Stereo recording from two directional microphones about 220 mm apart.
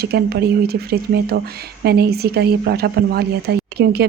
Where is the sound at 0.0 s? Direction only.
45° right (ahead or behind).